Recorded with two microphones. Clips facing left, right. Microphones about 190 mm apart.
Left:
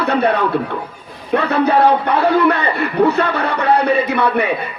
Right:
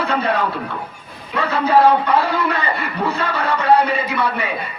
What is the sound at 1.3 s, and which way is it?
Speech, 65° left (ahead or behind).